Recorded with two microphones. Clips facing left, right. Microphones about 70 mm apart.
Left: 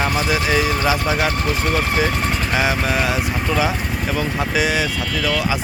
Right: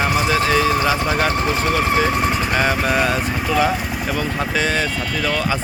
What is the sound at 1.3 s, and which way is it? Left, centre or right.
Speech, right.